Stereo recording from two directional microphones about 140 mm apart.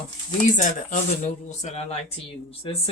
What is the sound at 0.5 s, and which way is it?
Speech, 65° left (ahead or behind).